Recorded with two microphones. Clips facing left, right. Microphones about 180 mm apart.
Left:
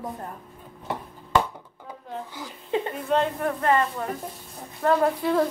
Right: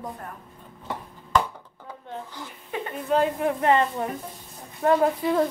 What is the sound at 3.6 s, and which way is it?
Speech, 20° right (ahead or behind).